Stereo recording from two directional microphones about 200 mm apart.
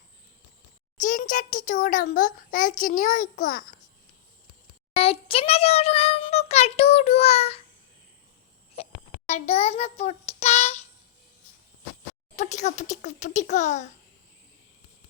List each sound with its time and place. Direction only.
0.9 s a child's voice: 40° left (ahead or behind)
4.9 s a child's voice: 30° left (ahead or behind)
8.7 s a child's voice: 30° left (ahead or behind)
12.4 s a child's voice: 35° left (ahead or behind)